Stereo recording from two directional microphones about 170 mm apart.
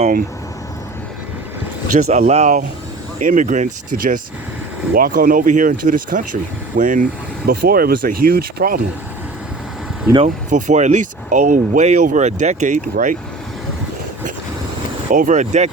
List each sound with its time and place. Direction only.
2.0 s speech: 40° right (ahead or behind); by 8.8 s 60° right (ahead or behind)
10.2 s speech: 45° right (ahead or behind)
15.1 s speech: 50° right (ahead or behind)